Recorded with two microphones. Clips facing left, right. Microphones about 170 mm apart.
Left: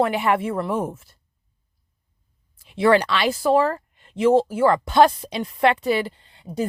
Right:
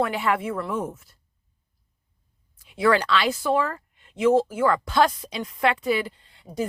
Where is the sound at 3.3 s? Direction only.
35° left (ahead or behind).